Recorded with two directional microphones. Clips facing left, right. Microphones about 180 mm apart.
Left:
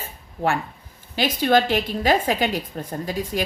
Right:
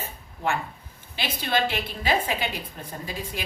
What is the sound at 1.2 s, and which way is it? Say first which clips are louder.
A woman's voice: left 7 dB; 45° left (ahead or behind).